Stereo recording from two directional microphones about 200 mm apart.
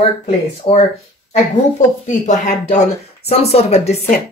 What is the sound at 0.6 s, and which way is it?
Speech, 30° left (ahead or behind).